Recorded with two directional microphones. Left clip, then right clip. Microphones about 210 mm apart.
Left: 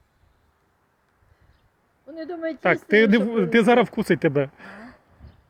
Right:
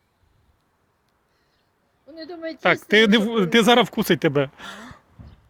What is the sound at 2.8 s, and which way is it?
Speech, 10° right (ahead or behind).